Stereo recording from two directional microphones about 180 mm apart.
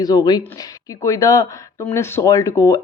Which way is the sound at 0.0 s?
20° left (ahead or behind).